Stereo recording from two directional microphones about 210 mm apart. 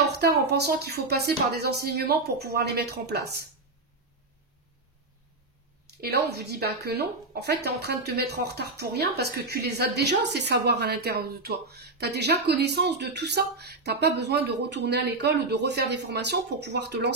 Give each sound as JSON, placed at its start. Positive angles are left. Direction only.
{"t": 0.0, "sound": "a woman's voice", "side_deg": -50}
{"t": 5.9, "sound": "a woman's voice", "side_deg": -50}